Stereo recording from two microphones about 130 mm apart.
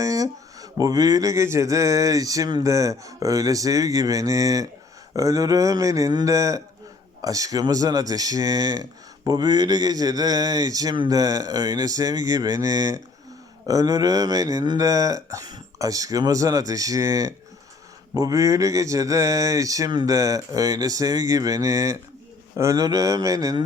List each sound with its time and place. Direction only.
0.0 s speech: 25° right (ahead or behind)